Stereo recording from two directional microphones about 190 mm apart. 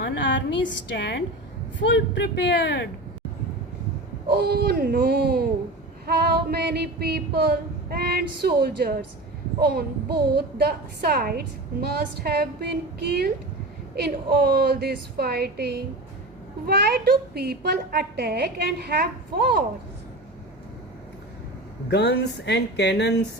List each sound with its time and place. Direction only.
0.0 s a woman's voice: 70° left (ahead or behind)
4.3 s a woman's voice: 55° right (ahead or behind)
21.8 s speech: 60° left (ahead or behind)